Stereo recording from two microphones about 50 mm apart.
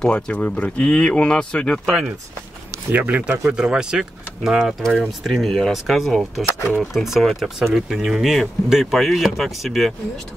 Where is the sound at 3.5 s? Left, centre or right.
Centre.